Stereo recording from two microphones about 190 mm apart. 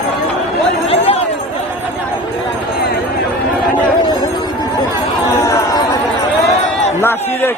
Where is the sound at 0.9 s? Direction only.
30° left (ahead or behind).